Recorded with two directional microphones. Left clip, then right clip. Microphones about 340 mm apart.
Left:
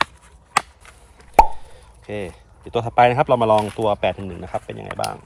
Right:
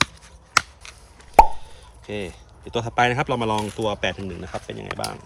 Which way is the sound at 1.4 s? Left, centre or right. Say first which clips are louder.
Even; centre.